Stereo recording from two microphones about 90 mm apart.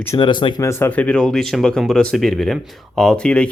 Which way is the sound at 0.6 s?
30° left (ahead or behind).